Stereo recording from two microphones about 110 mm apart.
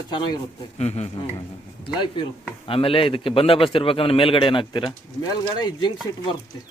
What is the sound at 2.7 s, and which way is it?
A man's voice, 55° left (ahead or behind).